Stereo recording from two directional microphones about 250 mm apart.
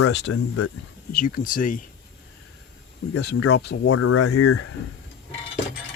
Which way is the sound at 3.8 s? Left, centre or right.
Left.